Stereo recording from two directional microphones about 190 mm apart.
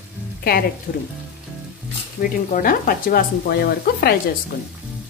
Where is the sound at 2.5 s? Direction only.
50° left (ahead or behind).